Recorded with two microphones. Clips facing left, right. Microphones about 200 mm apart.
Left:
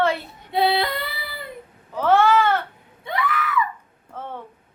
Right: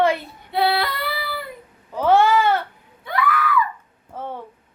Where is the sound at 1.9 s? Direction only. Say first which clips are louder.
Right 1 dB; 15° right (ahead or behind).